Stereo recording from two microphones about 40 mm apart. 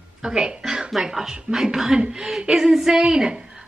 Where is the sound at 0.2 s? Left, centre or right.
Centre.